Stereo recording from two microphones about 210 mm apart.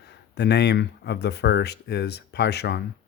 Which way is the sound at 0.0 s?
50° left (ahead or behind).